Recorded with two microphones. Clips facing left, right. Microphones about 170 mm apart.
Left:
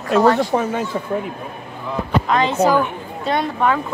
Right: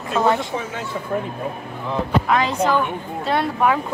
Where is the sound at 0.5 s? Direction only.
55° left (ahead or behind).